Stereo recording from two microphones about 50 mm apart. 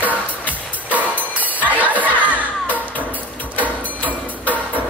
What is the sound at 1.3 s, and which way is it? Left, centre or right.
Crowd, right.